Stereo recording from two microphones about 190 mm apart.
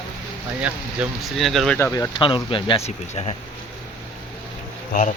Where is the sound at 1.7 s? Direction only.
15° left (ahead or behind).